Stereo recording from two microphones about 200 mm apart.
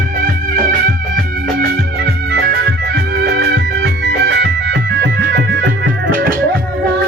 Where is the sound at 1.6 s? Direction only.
50° right (ahead or behind).